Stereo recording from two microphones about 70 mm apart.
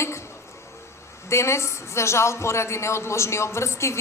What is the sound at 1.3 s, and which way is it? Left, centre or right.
Speech, left.